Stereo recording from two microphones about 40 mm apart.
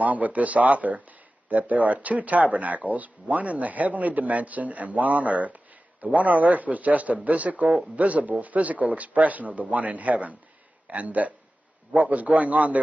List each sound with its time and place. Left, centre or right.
0.0 s speech: right